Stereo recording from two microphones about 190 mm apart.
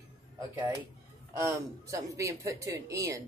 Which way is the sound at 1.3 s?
15° right (ahead or behind).